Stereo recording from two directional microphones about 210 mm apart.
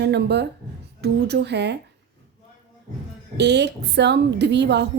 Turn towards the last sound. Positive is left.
turn(degrees=-55)  # may be behind; listen again after turning